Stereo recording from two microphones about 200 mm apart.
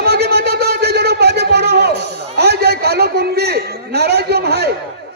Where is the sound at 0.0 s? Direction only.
55° right (ahead or behind).